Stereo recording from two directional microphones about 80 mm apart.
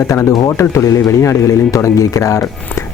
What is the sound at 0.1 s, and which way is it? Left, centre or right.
Speech, left.